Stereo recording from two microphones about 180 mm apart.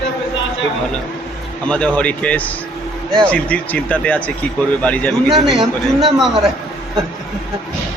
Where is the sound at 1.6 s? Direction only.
5° left (ahead or behind).